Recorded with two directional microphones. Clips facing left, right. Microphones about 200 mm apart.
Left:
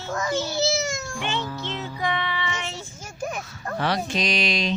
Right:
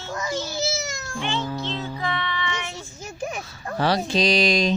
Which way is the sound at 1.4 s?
20° right (ahead or behind).